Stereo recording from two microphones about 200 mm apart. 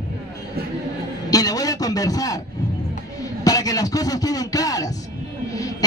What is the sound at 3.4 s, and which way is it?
A man's voice, 15° left (ahead or behind).